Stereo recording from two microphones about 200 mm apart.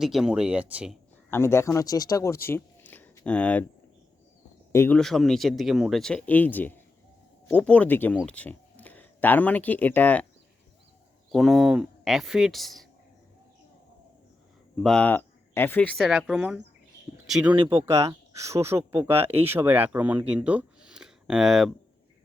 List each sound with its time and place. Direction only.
0.0 s speech: centre (ahead or behind)
1.3 s speech: 15° left (ahead or behind)
4.7 s speech: 10° left (ahead or behind)
11.3 s speech: centre (ahead or behind)
14.8 s speech: 5° left (ahead or behind)